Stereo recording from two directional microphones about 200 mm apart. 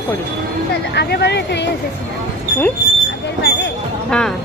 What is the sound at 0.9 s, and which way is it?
Speech, 55° left (ahead or behind).